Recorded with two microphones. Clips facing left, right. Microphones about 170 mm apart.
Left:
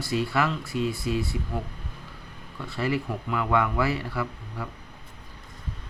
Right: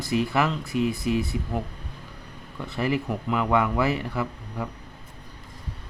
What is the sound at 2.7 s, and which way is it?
Speech, 20° right (ahead or behind).